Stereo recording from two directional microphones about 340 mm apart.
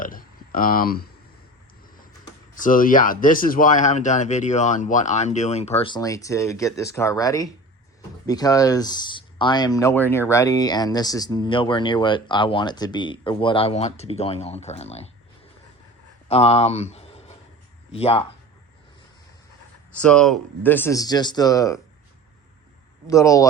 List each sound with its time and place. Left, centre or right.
0.0 s speech: left
2.6 s speech: left
16.3 s speech: centre
19.9 s speech: centre
23.0 s speech: centre